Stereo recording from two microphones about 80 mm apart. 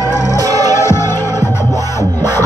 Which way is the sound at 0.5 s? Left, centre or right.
Right.